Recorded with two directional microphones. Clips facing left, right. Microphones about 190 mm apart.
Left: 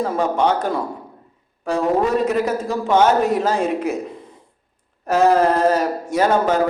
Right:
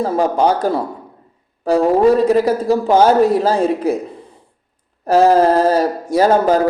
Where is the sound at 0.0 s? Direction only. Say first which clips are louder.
Right 4 dB; 35° right (ahead or behind).